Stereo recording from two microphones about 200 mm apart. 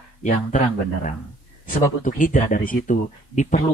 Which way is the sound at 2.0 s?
40° left (ahead or behind).